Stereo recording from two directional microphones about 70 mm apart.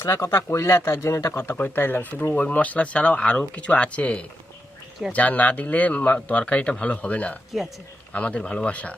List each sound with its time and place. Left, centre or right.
0.0 s speech: left
1.3 s speech: left